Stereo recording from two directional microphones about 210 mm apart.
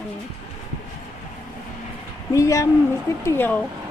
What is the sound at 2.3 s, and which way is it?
A woman's voice, 15° left (ahead or behind).